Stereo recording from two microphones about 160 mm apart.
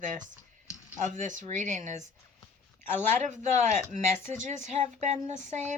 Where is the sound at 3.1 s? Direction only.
50° right (ahead or behind).